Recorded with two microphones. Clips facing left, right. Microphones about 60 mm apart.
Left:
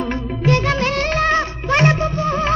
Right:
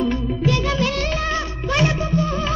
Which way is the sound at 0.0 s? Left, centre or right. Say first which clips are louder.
Even; left.